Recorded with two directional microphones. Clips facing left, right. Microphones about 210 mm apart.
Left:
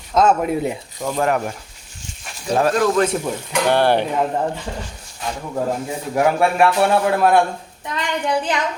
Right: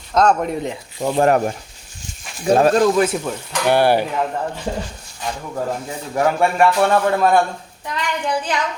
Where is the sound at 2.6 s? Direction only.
30° right (ahead or behind).